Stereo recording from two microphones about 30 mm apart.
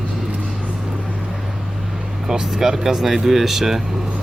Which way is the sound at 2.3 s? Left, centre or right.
Centre.